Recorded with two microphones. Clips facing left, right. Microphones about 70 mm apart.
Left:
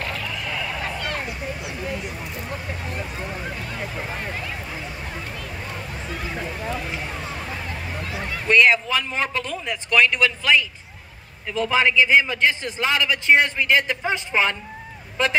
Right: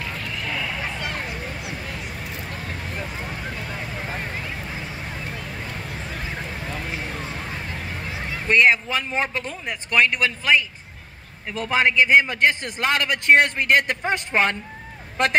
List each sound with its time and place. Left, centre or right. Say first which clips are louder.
8.5 s a sound: left 1 dB; right
9.7 s speech: left 1 dB; right
11.7 s a man's voice: right 1 dB; right